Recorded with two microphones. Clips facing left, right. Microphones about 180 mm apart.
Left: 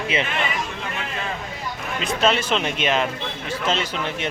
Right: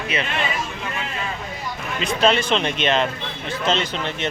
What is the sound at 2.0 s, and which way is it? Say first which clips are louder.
Speech: right 2 dB; centre (ahead or behind).